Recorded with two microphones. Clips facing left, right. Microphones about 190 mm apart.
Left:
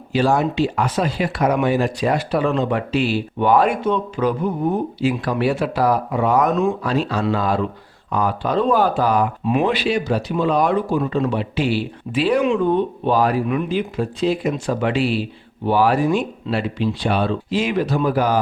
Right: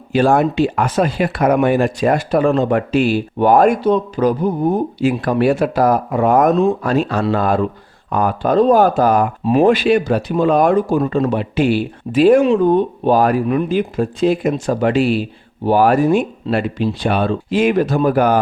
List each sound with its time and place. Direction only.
0.1 s speech: 55° right (ahead or behind)